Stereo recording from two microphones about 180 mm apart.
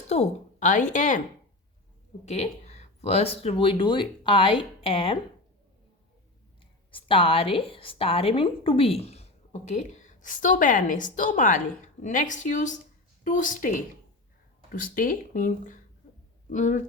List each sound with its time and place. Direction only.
0.1 s a woman's voice: 40° left (ahead or behind)
2.2 s speech: 40° left (ahead or behind)
6.9 s a woman's voice: 30° left (ahead or behind)